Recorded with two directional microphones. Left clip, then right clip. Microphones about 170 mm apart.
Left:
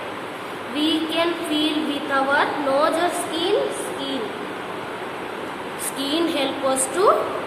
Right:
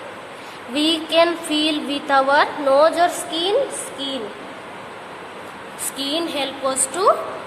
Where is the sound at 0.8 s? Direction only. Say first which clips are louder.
Right 5 dB; 60° right (ahead or behind).